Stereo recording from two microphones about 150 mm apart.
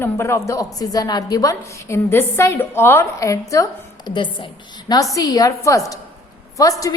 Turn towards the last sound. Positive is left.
turn(degrees=25)  # may be behind; listen again after turning